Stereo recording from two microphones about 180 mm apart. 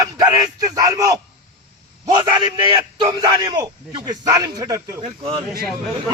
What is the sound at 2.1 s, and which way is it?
A man's voice, 25° right (ahead or behind).